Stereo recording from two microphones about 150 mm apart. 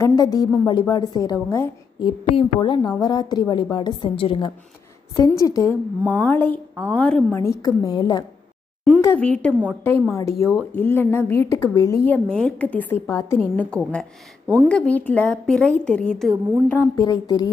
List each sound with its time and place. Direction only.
0.0 s a sound: 25° left (ahead or behind)
0.7 s a woman's voice: 30° left (ahead or behind)
2.0 s a woman's voice: 35° left (ahead or behind)
5.1 s a woman's voice: 20° left (ahead or behind)
9.0 s a woman's voice: 10° left (ahead or behind)
12.1 s a woman's voice: 5° left (ahead or behind)
13.7 s a woman's voice: 5° left (ahead or behind)
14.4 s speech: 10° right (ahead or behind)
14.7 s a woman's voice: 10° left (ahead or behind)
17.0 s a woman's voice: 25° left (ahead or behind)